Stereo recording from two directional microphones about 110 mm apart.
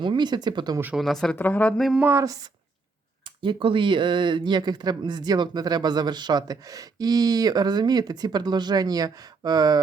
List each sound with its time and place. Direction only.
0.0 s speech: 45° right (ahead or behind)
0.9 s speech: centre (ahead or behind)
1.4 s speech: 15° left (ahead or behind)
2.0 s speech: 20° right (ahead or behind)
2.2 s speech: 35° right (ahead or behind)
3.2 s speech: 50° right (ahead or behind)